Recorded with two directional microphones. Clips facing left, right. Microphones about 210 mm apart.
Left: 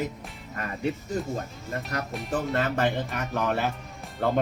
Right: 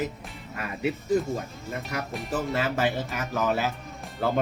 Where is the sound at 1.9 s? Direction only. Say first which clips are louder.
Even; 5° right (ahead or behind).